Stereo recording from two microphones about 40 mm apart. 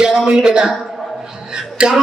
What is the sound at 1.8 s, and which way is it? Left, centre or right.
Speech, right.